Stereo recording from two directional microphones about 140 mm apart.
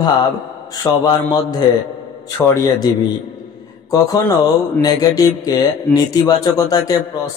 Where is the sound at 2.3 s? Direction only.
25° left (ahead or behind).